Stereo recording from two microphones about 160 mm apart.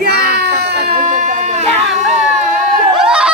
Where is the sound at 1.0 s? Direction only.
50° right (ahead or behind).